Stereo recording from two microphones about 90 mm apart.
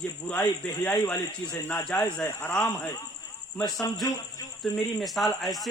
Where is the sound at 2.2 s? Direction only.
10° left (ahead or behind).